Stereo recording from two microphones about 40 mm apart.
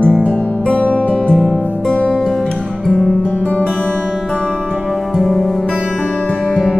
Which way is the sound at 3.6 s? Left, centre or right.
Centre.